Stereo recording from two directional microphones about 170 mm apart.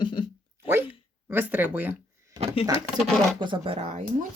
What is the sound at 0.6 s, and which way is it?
Speech, 15° right (ahead or behind).